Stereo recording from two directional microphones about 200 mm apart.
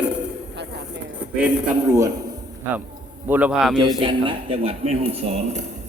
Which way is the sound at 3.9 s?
25° right (ahead or behind).